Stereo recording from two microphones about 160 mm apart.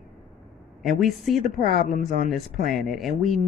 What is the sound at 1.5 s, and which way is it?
Speech, 55° left (ahead or behind).